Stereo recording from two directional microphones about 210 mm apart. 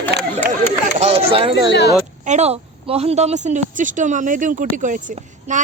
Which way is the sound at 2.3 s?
30° right (ahead or behind).